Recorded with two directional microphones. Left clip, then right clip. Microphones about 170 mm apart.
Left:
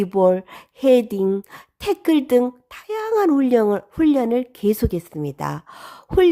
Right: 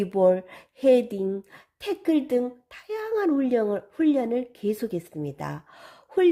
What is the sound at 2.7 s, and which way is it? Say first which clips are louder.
Speech: left 6 dB; 30° left (ahead or behind).